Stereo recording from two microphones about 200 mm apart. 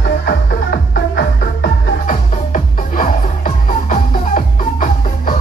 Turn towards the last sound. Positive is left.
turn(degrees=40)  # may be behind; listen again after turning